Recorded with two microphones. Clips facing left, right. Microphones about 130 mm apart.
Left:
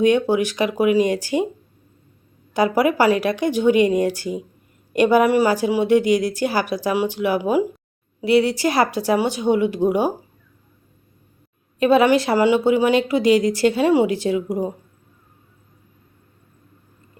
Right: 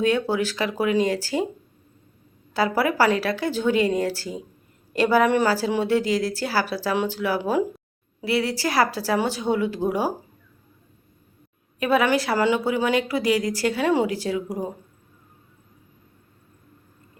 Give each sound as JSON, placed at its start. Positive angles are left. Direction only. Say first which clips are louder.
{"t": 0.0, "sound": "speech", "louder": "left 5 dB", "side_deg": 20}
{"t": 2.5, "sound": "a woman's voice", "louder": "left 4 dB", "side_deg": 20}
{"t": 11.8, "sound": "speech", "louder": "left 6 dB", "side_deg": 25}